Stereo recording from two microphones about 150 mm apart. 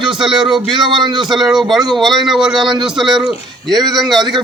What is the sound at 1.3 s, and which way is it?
A man's voice, centre (ahead or behind).